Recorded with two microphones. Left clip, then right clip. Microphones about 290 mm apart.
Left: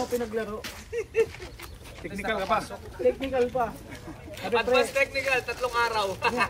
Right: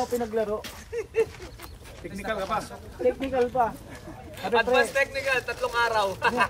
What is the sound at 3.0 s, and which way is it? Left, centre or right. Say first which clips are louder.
Speech: even; right.